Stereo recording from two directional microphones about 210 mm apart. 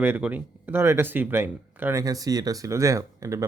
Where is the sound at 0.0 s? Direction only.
10° right (ahead or behind).